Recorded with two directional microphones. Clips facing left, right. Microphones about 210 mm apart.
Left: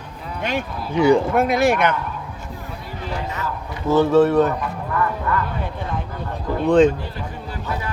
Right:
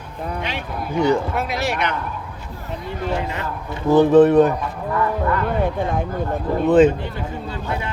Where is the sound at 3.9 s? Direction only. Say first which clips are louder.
Right 3 dB; 15° right (ahead or behind).